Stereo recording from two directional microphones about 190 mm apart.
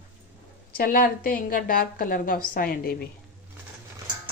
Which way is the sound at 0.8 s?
50° left (ahead or behind).